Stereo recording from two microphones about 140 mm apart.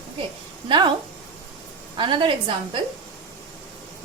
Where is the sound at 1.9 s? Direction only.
35° right (ahead or behind).